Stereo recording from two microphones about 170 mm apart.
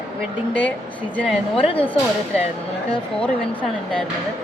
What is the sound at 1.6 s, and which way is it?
Speech, 30° left (ahead or behind).